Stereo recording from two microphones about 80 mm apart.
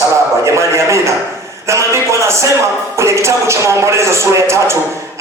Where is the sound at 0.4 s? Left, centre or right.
Right.